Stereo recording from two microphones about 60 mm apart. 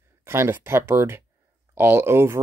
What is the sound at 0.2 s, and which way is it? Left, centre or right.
Speech, right.